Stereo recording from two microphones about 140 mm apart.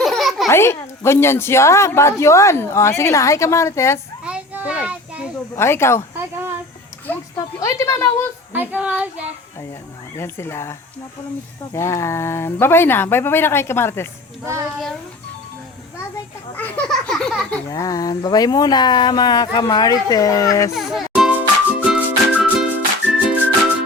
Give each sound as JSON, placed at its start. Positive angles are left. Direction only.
{"t": 0.0, "sound": "a sound", "side_deg": 0}
{"t": 0.4, "sound": "a woman's voice", "side_deg": 20}
{"t": 4.2, "sound": "children playing", "side_deg": -10}
{"t": 5.5, "sound": "speech", "side_deg": 20}
{"t": 6.1, "sound": "a sound", "side_deg": -15}
{"t": 7.3, "sound": "a woman's voice", "side_deg": 25}
{"t": 8.5, "sound": "speech", "side_deg": -10}
{"t": 10.2, "sound": "a woman's voice", "side_deg": 15}
{"t": 16.6, "sound": "baby laughter", "side_deg": 10}
{"t": 17.7, "sound": "a woman's voice", "side_deg": 25}
{"t": 20.7, "sound": "music", "side_deg": 0}